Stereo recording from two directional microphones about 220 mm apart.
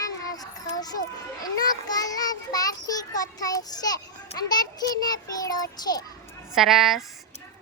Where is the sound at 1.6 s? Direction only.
15° left (ahead or behind).